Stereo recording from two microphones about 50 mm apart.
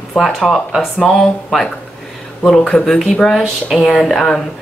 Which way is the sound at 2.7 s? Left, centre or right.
Centre.